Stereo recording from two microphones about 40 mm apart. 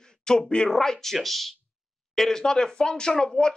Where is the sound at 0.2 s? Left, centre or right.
Centre.